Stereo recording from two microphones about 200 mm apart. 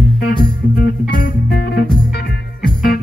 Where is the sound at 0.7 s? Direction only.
50° left (ahead or behind).